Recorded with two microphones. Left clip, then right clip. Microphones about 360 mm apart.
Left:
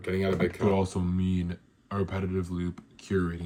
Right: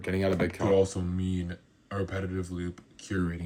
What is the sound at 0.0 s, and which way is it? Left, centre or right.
Speech, right.